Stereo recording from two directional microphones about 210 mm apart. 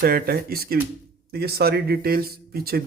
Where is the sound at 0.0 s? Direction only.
45° right (ahead or behind).